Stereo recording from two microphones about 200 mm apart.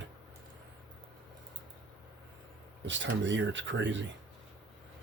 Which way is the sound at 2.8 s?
65° right (ahead or behind).